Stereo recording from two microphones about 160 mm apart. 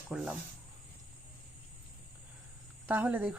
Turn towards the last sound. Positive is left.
turn(degrees=-10)  # may be behind; listen again after turning